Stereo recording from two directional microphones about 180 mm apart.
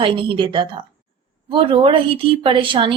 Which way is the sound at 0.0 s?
25° right (ahead or behind).